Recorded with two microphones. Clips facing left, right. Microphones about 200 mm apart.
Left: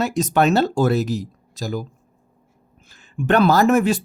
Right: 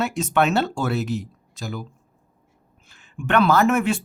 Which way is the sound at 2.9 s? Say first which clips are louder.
Left 3 dB; 35° left (ahead or behind).